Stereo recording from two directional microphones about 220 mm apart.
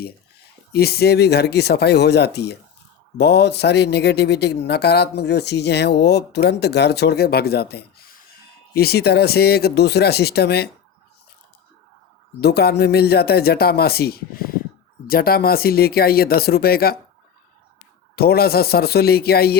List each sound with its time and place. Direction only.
0.7 s speech: 45° left (ahead or behind)
12.4 s speech: 45° left (ahead or behind)
18.2 s speech: 45° left (ahead or behind)